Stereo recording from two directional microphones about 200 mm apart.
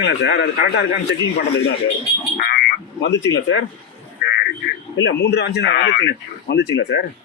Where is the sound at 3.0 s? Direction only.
65° left (ahead or behind).